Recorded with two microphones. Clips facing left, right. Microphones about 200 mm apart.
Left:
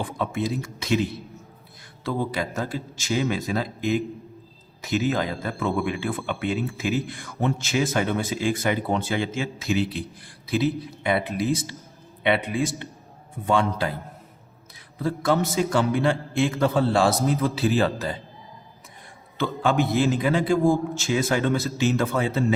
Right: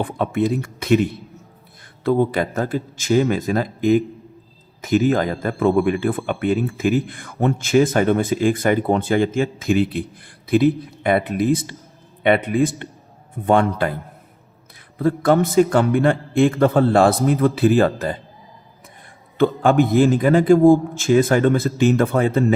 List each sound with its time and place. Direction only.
0.0 s a man's voice: 60° right (ahead or behind)
2.0 s a man's voice: 55° right (ahead or behind)
14.9 s a man's voice: 55° right (ahead or behind)
19.4 s speech: 55° right (ahead or behind)